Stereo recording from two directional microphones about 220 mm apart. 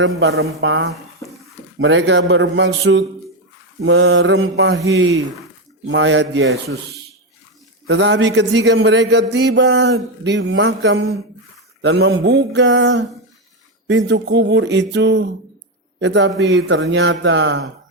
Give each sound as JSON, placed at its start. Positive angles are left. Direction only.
{"t": 0.0, "sound": "a man's voice", "side_deg": -50}
{"t": 3.8, "sound": "mantra", "side_deg": -55}
{"t": 5.9, "sound": "mantra", "side_deg": -55}
{"t": 7.9, "sound": "a man's voice", "side_deg": -55}